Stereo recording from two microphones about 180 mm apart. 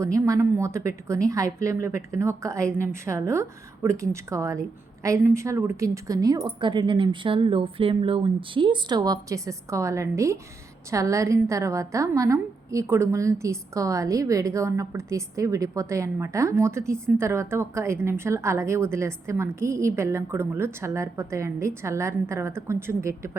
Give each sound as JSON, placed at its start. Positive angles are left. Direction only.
{"t": 0.0, "sound": "a woman's voice", "side_deg": -15}